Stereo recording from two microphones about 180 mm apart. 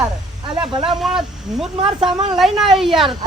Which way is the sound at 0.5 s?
25° right (ahead or behind).